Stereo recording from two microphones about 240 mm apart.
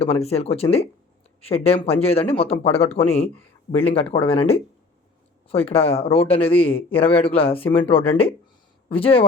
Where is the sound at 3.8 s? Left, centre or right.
Left.